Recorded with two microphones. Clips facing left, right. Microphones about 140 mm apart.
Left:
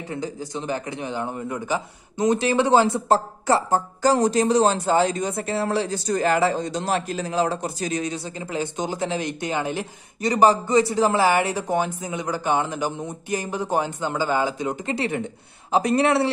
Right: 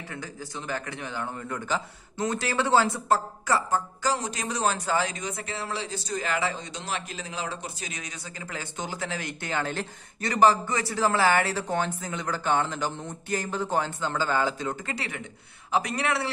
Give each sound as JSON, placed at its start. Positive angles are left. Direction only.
{"t": 0.1, "sound": "a man's voice", "side_deg": 20}
{"t": 4.0, "sound": "speech", "side_deg": 40}
{"t": 8.5, "sound": "speech", "side_deg": 20}